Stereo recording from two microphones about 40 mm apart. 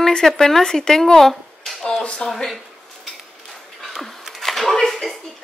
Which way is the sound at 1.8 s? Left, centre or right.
Left.